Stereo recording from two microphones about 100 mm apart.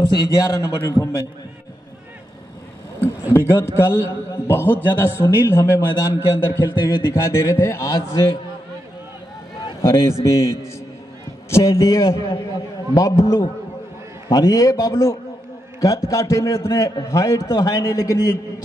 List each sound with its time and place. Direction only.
0.1 s a man's voice: 40° left (ahead or behind)
3.7 s a man's voice: 25° left (ahead or behind)
9.8 s a man's voice: 30° left (ahead or behind)